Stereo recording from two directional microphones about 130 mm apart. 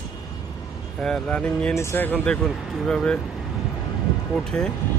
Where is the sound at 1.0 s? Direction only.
5° left (ahead or behind).